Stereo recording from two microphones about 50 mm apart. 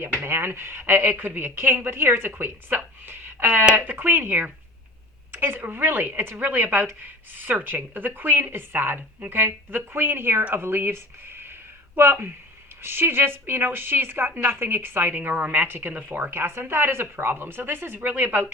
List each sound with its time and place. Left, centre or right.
0.2 s a woman's voice: right